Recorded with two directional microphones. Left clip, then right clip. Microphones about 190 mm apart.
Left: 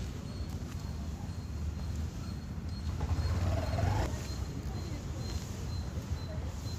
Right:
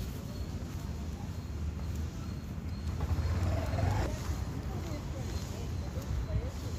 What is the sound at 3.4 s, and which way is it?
Vehicle, 30° right (ahead or behind).